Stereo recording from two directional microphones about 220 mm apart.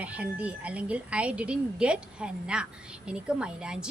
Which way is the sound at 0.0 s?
5° right (ahead or behind).